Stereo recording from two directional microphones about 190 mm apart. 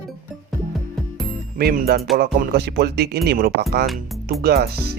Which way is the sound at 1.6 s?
50° right (ahead or behind).